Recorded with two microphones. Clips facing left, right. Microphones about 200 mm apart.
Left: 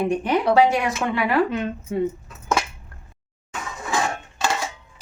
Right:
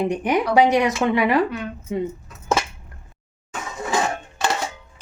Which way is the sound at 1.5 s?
25° left (ahead or behind).